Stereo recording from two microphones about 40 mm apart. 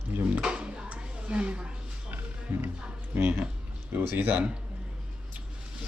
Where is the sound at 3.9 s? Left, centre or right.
Right.